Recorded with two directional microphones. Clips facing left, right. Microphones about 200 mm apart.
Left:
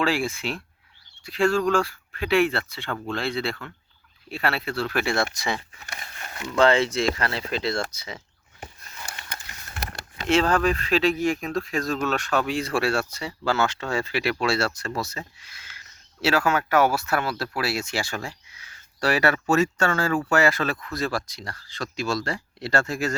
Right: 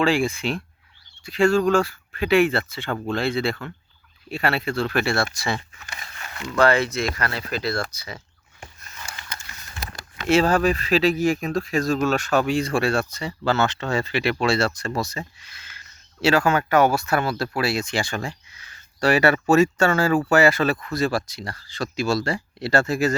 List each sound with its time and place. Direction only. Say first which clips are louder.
0.0 s speech: right 4 dB; 5° left (ahead or behind)
5.0 s speech: right 1 dB; 20° left (ahead or behind)
6.6 s speech: even; 25° left (ahead or behind)
10.2 s speech: right 3 dB; 10° right (ahead or behind)